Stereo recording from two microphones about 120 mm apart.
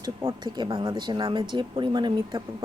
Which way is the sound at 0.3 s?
40° right (ahead or behind).